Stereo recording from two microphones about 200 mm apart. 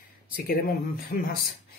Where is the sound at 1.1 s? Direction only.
45° left (ahead or behind).